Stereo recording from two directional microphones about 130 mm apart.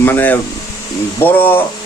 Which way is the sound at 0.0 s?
15° left (ahead or behind).